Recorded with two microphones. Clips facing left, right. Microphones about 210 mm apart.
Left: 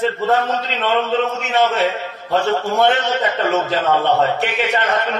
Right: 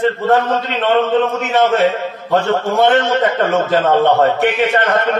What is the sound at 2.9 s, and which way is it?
A man's voice, 50° right (ahead or behind).